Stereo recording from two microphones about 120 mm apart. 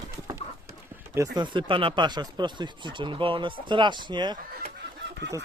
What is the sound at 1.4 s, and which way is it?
Speech, 45° right (ahead or behind).